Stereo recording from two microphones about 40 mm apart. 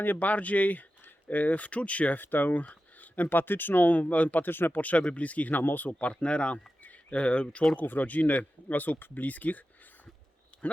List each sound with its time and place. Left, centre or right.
0.0 s speech: left
2.1 s speech: left
3.2 s speech: left
4.5 s speech: left
4.8 s speech: left
5.5 s speech: left
7.8 s speech: left
10.5 s a sound: left